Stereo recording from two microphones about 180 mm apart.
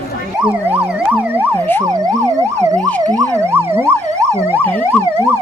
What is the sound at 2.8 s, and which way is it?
Emergency vehicle, 10° left (ahead or behind).